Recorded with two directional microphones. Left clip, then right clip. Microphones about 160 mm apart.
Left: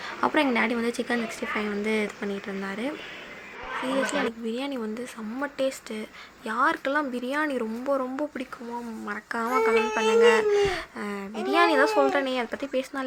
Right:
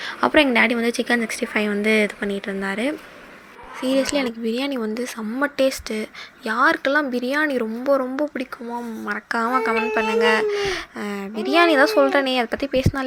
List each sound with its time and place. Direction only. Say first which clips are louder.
0.0 s speech: right 7 dB; 15° right (ahead or behind)